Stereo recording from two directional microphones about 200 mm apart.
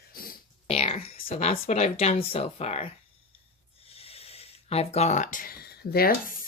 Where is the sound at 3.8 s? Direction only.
30° left (ahead or behind); by 6.3 s 50° left (ahead or behind).